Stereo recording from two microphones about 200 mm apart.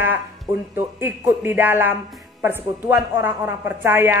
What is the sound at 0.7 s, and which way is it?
A woman's voice, 10° right (ahead or behind).